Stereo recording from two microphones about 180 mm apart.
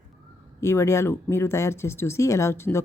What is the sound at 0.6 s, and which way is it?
Speech, 15° left (ahead or behind).